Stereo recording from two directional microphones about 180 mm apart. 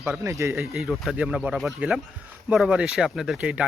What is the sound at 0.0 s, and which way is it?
Speech, 5° right (ahead or behind).